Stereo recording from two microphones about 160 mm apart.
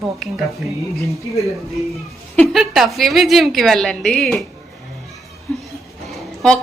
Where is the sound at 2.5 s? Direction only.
Centre (ahead or behind).